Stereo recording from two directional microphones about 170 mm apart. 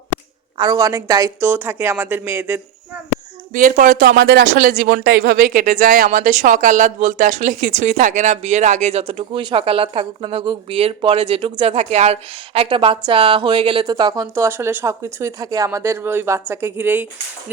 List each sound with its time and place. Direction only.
0.5 s a woman's voice: 25° right (ahead or behind)
3.5 s a woman's voice: 50° right (ahead or behind); by 17.1 s 10° right (ahead or behind)